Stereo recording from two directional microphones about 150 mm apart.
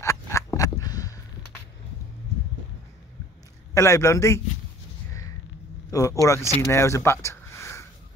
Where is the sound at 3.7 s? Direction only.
20° left (ahead or behind).